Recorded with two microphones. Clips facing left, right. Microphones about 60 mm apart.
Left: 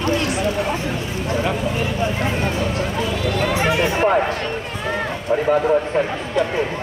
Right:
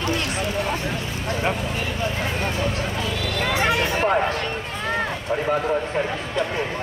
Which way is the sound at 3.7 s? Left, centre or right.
Left.